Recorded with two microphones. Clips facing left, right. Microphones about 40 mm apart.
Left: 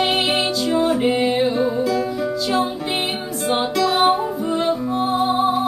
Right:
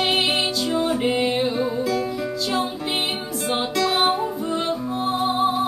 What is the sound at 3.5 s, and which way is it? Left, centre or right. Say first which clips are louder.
Music: left 3 dB; centre.